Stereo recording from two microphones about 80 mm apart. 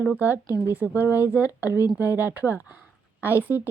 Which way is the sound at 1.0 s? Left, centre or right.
Left.